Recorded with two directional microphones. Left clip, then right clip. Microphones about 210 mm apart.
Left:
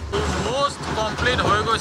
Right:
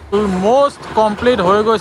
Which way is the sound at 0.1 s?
10° right (ahead or behind).